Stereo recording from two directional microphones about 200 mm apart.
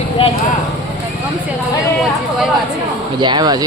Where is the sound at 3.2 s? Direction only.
20° right (ahead or behind).